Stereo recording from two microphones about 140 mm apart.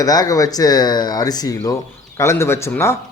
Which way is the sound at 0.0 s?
25° left (ahead or behind).